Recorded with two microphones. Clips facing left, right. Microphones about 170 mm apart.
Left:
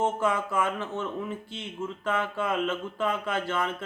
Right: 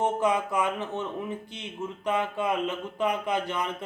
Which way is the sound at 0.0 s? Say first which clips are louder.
Right 1 dB; 20° right (ahead or behind).